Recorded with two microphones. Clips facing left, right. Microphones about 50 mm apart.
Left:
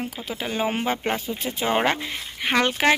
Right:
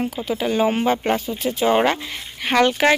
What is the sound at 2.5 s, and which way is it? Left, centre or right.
Speech, centre.